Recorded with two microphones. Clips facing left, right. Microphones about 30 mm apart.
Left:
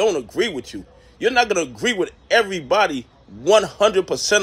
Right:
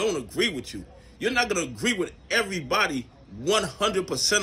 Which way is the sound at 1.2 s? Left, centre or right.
Left.